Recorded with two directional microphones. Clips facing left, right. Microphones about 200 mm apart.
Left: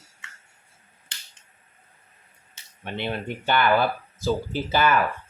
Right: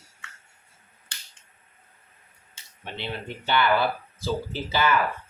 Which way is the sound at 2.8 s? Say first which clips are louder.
Left 5 dB; 50° left (ahead or behind).